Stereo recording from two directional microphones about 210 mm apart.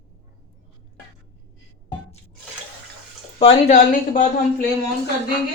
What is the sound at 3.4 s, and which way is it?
Speech, 30° left (ahead or behind).